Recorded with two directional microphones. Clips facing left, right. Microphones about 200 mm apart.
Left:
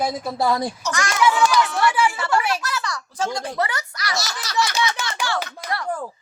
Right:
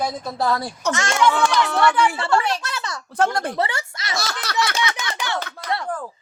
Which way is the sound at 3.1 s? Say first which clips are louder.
Right 6 dB; 60° right (ahead or behind).